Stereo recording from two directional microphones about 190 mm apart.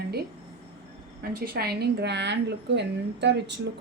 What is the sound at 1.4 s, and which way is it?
Speech, 55° right (ahead or behind).